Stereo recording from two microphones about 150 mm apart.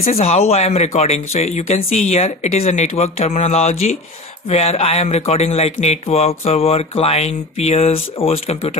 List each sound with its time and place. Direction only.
0.1 s speech: 45° left (ahead or behind)